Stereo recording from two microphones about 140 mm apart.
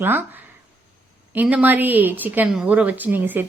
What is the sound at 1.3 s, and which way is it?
Speech, 10° right (ahead or behind).